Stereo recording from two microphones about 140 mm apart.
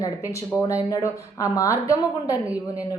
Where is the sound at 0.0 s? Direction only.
25° left (ahead or behind).